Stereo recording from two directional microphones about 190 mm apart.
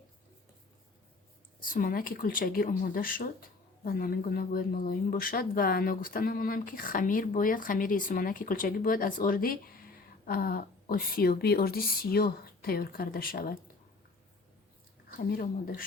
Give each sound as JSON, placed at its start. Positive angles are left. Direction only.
{"t": 1.6, "sound": "speech", "side_deg": 50}
{"t": 15.2, "sound": "speech", "side_deg": 50}